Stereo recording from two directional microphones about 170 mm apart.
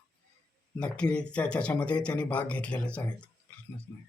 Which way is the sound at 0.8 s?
5° left (ahead or behind).